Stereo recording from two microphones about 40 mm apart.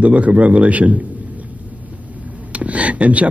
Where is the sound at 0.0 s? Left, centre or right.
Right.